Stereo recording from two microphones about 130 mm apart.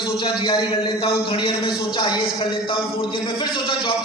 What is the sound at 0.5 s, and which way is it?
A man's voice, 45° left (ahead or behind).